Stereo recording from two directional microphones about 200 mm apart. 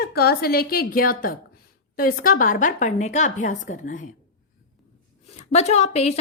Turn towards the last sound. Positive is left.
turn(degrees=30)  # may be behind; listen again after turning